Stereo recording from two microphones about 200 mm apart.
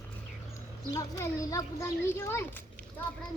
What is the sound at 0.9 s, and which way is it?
Speech, 15° left (ahead or behind).